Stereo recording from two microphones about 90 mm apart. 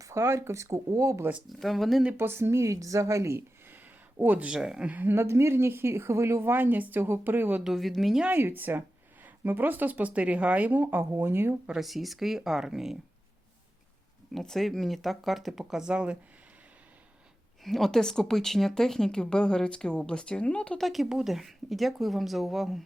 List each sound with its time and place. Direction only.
0.0 s speech: 30° right (ahead or behind)
1.5 s speech: centre (ahead or behind)
2.1 s speech: 25° right (ahead or behind)
4.2 s a woman's voice: 20° right (ahead or behind)
7.6 s speech: centre (ahead or behind)
8.3 s a woman's voice: 20° right (ahead or behind)
11.6 s speech: 5° right (ahead or behind)
14.3 s speech: 5° left (ahead or behind); by 16.1 s 10° right (ahead or behind)
17.6 s speech: centre (ahead or behind)
20.8 s speech: centre (ahead or behind)